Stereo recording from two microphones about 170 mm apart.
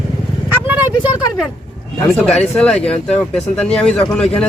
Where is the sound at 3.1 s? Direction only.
5° left (ahead or behind).